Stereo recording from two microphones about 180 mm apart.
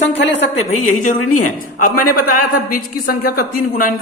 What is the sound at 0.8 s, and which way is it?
Speech, 45° left (ahead or behind).